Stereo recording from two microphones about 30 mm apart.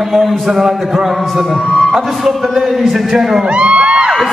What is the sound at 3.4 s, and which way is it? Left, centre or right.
Music, right.